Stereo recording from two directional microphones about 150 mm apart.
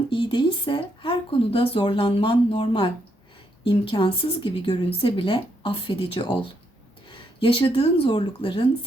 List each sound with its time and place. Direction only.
0.1 s speech: 30° left (ahead or behind)